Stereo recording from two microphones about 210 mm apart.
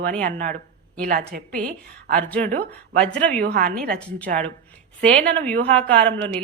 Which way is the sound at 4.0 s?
5° left (ahead or behind).